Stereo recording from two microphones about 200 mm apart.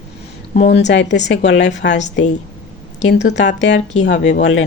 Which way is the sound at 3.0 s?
60° left (ahead or behind).